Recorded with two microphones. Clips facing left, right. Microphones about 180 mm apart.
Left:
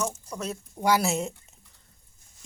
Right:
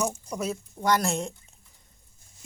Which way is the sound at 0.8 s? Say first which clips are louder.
Left 1 dB; 5° left (ahead or behind).